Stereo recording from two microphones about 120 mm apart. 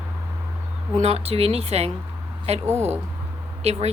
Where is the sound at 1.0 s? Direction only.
60° right (ahead or behind).